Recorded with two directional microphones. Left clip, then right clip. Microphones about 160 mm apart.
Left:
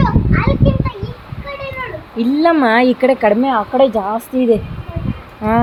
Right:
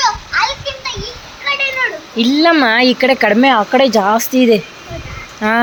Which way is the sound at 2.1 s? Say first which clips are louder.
Right 1 dB; centre (ahead or behind).